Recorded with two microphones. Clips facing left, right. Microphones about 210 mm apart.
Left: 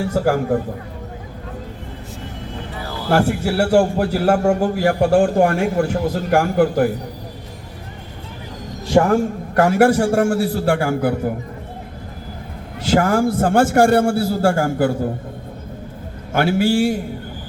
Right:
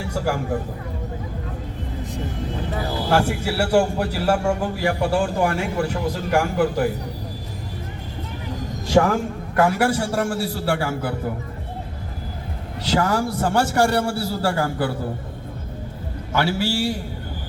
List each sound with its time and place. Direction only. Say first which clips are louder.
0.0 s a man's voice: left 6 dB; 50° left (ahead or behind)
3.1 s a man's voice: left 5 dB; 45° left (ahead or behind)
9.6 s a man's voice: left 5 dB; 50° left (ahead or behind)
12.8 s a man's voice: left 5 dB; 50° left (ahead or behind)
16.3 s a man's voice: left 6 dB; 50° left (ahead or behind)